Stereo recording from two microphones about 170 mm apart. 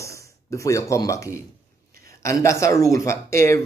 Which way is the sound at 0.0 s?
15° left (ahead or behind).